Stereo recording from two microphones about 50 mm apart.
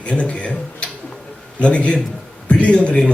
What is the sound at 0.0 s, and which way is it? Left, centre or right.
Speech, left.